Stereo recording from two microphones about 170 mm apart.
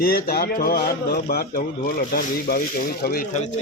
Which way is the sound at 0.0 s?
60° left (ahead or behind).